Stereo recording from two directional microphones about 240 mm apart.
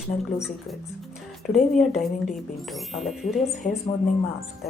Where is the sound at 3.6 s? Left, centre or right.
Left.